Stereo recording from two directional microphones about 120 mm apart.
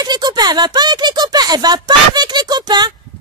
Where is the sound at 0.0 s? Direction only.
35° right (ahead or behind).